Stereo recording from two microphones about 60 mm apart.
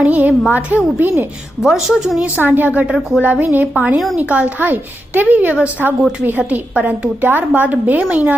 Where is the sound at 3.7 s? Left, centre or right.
Centre.